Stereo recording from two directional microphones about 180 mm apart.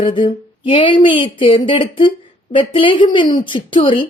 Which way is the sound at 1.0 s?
30° left (ahead or behind).